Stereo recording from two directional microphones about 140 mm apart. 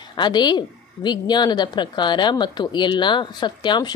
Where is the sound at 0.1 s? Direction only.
30° left (ahead or behind).